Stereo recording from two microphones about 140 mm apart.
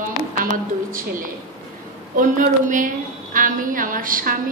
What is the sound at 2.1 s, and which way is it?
A woman's voice, 70° right (ahead or behind).